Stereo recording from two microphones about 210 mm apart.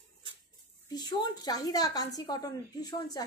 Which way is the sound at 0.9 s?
20° left (ahead or behind).